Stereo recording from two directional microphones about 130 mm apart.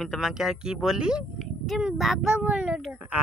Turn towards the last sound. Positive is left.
turn(degrees=-10)  # may be behind; listen again after turning